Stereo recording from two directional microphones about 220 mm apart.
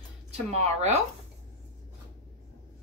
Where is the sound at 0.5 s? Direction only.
30° right (ahead or behind).